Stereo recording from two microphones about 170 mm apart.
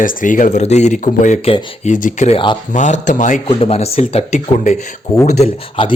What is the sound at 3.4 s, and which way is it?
Speech, 35° left (ahead or behind).